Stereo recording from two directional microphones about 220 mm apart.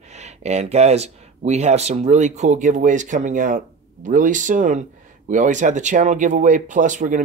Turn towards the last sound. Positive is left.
turn(degrees=-35)  # may be behind; listen again after turning